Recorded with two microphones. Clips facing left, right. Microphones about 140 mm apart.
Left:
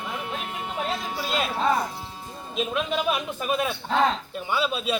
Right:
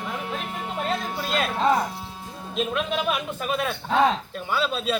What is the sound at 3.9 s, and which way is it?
Speech, 10° right (ahead or behind).